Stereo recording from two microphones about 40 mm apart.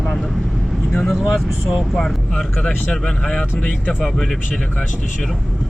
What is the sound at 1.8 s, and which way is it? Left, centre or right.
Speech, centre.